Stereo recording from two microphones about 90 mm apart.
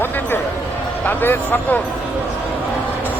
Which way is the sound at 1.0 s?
20° left (ahead or behind).